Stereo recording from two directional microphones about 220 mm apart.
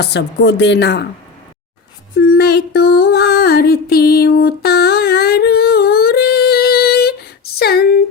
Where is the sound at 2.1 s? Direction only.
45° left (ahead or behind).